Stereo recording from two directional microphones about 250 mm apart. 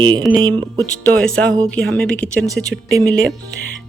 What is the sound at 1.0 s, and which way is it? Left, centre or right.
Speech, centre.